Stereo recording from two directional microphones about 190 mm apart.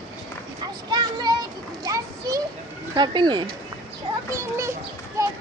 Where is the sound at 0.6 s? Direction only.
20° right (ahead or behind).